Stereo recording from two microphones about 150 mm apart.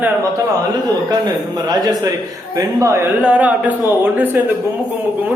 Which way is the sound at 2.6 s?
20° right (ahead or behind).